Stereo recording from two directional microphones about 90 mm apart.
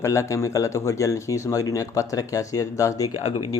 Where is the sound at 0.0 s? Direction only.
35° left (ahead or behind).